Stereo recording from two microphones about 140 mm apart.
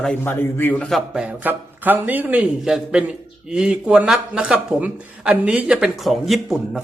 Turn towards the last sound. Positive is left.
turn(degrees=0)  # may be behind; listen again after turning